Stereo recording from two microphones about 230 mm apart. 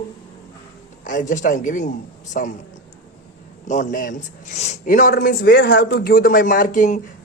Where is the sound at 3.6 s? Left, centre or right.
Left.